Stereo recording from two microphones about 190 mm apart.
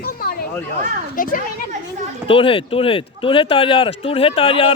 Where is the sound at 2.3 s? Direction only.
30° left (ahead or behind).